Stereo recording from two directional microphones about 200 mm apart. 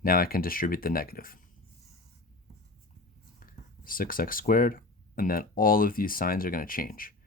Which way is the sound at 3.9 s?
45° left (ahead or behind).